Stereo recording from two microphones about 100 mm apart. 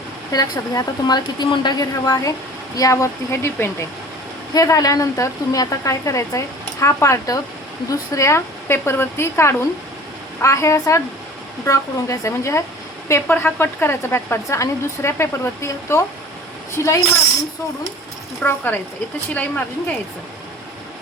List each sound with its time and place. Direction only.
0.3 s speech: 40° left (ahead or behind)
4.5 s a woman's voice: 40° left (ahead or behind)
18.4 s a woman's voice: 20° left (ahead or behind)